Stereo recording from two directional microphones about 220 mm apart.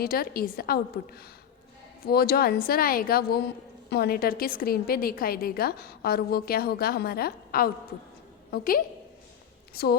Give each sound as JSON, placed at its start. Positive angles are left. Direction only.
{"t": 0.0, "sound": "a woman's voice", "side_deg": 45}